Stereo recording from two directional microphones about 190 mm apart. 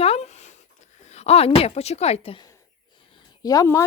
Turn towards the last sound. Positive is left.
turn(degrees=15)  # may be behind; listen again after turning